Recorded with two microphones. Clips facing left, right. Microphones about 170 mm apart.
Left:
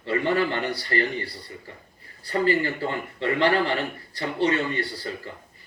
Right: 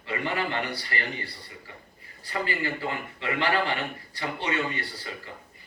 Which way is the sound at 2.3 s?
35° left (ahead or behind).